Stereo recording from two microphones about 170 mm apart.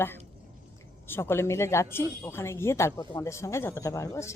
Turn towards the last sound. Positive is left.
turn(degrees=20)  # may be behind; listen again after turning